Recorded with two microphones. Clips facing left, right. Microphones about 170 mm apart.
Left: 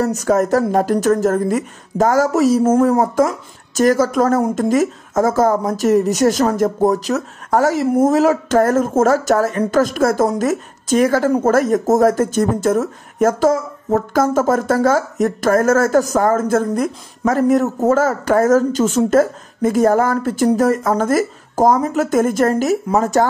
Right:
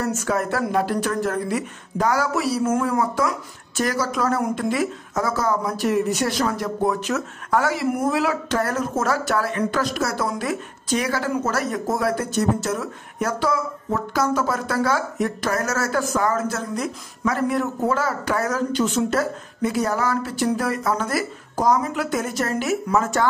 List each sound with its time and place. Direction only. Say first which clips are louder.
0.0 s speech: left 7 dB; 40° left (ahead or behind)